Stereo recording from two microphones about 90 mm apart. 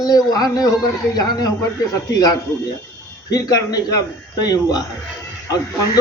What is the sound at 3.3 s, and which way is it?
Speech, 45° left (ahead or behind).